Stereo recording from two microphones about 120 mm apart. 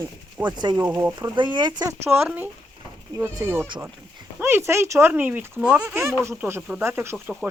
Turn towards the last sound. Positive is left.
turn(degrees=-20)  # may be behind; listen again after turning